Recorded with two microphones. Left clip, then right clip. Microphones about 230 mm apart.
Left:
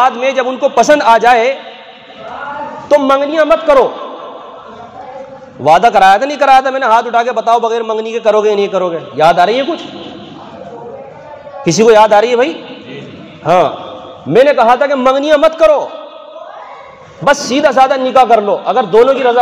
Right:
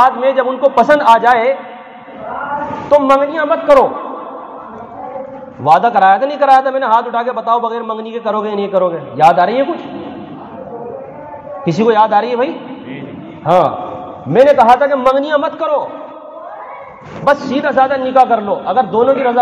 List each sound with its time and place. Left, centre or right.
0.0 s a man's voice: left
3.0 s a man's voice: left
5.6 s a man's voice: left
11.6 s a man's voice: left
17.2 s a man's voice: left